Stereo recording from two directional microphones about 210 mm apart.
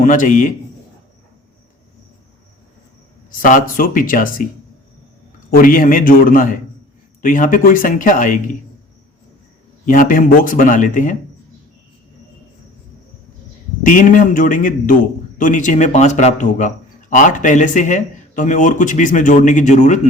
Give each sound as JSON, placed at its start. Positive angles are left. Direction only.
{"t": 0.0, "sound": "speech", "side_deg": 40}
{"t": 3.4, "sound": "speech", "side_deg": 40}
{"t": 5.5, "sound": "speech", "side_deg": 40}
{"t": 9.8, "sound": "speech", "side_deg": 40}
{"t": 13.8, "sound": "speech", "side_deg": 40}